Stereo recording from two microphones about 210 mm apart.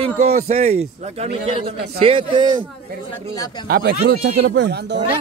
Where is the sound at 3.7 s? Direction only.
45° right (ahead or behind).